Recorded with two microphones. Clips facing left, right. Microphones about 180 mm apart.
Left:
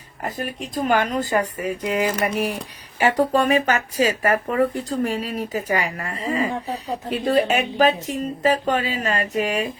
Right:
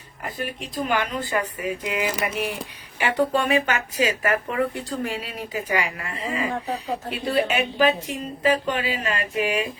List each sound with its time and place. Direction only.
0.3 s speech: 45° left (ahead or behind)